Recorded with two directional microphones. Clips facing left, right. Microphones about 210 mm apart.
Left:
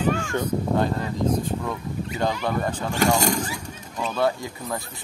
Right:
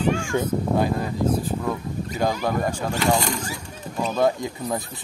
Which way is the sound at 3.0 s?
45° left (ahead or behind).